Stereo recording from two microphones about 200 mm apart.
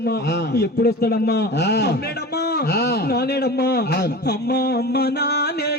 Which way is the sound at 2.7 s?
55° left (ahead or behind).